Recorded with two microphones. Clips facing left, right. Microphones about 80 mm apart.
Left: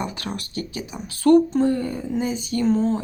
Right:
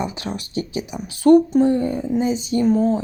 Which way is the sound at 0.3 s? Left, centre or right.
Right.